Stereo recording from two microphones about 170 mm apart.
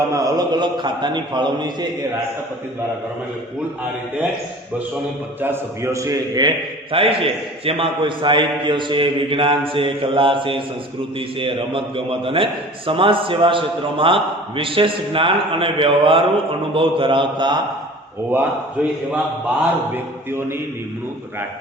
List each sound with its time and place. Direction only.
0.1 s a man's voice: 20° right (ahead or behind)
5.4 s a man's voice: 15° right (ahead or behind)
6.9 s a man's voice: 35° right (ahead or behind)
18.3 s a man's voice: 10° right (ahead or behind)